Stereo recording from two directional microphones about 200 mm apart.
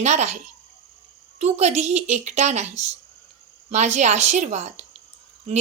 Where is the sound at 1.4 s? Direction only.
35° right (ahead or behind).